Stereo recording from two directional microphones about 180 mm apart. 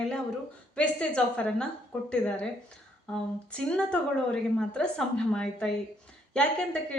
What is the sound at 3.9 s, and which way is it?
A woman's voice, 5° left (ahead or behind).